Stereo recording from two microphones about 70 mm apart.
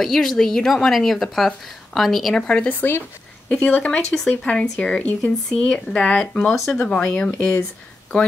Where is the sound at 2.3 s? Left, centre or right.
Centre.